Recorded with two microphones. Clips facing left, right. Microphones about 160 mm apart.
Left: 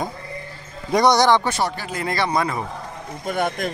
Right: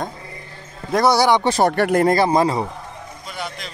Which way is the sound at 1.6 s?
55° right (ahead or behind).